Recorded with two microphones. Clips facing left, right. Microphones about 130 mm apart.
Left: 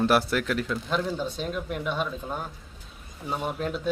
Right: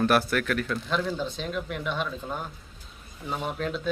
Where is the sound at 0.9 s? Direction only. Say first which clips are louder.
Left 1 dB; 10° left (ahead or behind).